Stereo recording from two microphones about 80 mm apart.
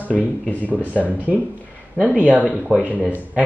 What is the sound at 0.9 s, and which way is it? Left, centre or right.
Speech, centre.